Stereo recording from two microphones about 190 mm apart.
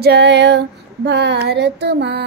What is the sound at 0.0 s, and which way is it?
Child singing, 60° right (ahead or behind).